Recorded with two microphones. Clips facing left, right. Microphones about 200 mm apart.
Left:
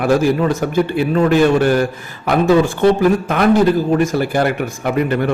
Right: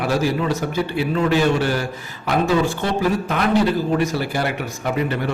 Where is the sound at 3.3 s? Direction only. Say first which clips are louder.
Left 4 dB; 50° left (ahead or behind).